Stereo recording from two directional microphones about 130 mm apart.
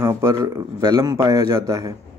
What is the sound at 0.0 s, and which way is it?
Speech, 25° right (ahead or behind).